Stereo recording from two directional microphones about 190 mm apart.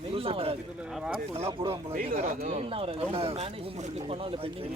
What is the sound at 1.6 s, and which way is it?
Speech, 30° right (ahead or behind).